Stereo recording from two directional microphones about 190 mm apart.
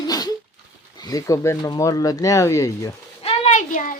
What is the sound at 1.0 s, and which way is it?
Speech, 20° left (ahead or behind).